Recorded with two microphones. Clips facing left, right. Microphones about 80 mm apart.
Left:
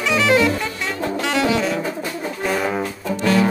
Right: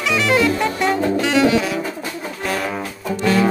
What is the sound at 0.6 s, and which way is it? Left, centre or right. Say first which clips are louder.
Music: right 7 dB; right.